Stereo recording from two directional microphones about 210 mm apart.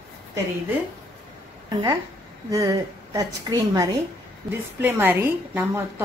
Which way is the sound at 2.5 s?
15° right (ahead or behind).